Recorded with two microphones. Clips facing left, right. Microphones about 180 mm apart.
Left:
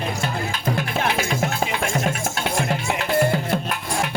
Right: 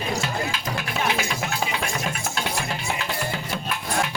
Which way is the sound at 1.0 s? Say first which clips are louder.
Left 1 dB; 50° left (ahead or behind).